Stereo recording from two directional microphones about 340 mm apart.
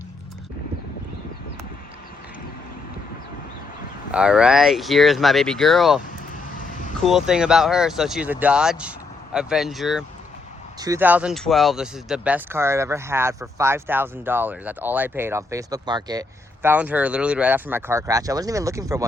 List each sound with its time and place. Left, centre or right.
4.1 s speech: centre
6.6 s vehicle: left
7.0 s speech: centre